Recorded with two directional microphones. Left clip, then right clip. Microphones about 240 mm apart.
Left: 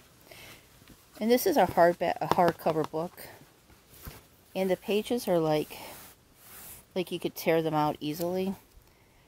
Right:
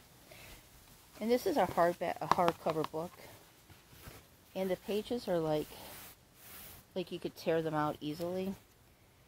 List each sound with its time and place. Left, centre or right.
1.2 s speech: left
4.6 s speech: left
6.9 s speech: left